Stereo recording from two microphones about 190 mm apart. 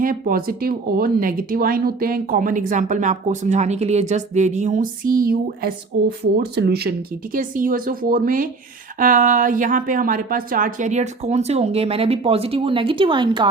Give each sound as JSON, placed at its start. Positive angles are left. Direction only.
{"t": 0.0, "sound": "speech", "side_deg": -50}
{"t": 7.3, "sound": "speech", "side_deg": -45}